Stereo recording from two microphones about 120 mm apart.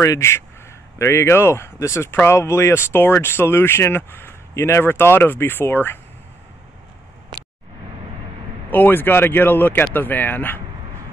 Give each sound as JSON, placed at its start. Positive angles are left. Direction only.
{"t": 0.0, "sound": "speech", "side_deg": 25}
{"t": 8.6, "sound": "speech", "side_deg": 15}